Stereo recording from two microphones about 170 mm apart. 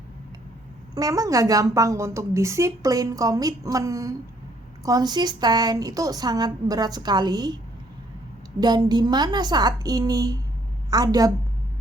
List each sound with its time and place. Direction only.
0.9 s a woman's voice: 20° right (ahead or behind)
8.6 s a woman's voice: 25° right (ahead or behind)